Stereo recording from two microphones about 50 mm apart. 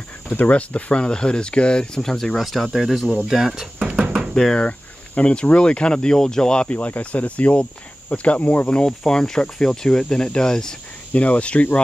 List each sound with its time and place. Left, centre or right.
0.5 s speech: left; by 3.6 s centre
3.8 s a sound: right
4.3 s speech: centre
4.6 s speech: left
8.6 s speech: centre
11.1 s speech: left